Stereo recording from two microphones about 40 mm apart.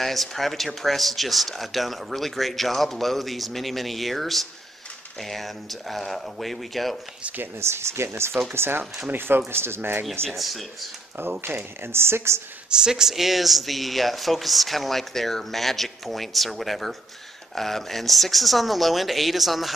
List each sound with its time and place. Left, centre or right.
0.0 s speech: centre
7.3 s speech: right
8.5 s speech: right
9.5 s speech: right
9.8 s speech: right
10.3 s speech: centre
11.4 s speech: right
12.6 s speech: centre
13.1 s speech: centre